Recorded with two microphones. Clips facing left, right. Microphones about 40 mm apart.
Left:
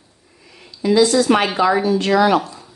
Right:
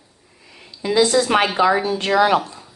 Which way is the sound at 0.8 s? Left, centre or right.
Right.